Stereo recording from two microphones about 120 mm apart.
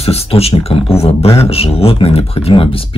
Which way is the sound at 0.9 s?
55° left (ahead or behind).